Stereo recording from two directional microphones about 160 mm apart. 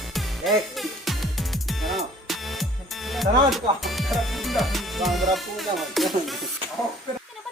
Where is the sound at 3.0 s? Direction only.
Centre (ahead or behind).